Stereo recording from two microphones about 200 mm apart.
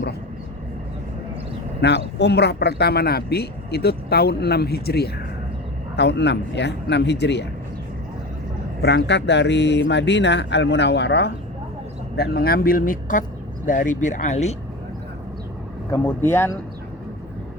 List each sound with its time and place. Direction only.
1.8 s speech: 55° left (ahead or behind)
8.8 s speech: 55° left (ahead or behind); by 14.5 s 35° left (ahead or behind)
15.9 s speech: 10° left (ahead or behind)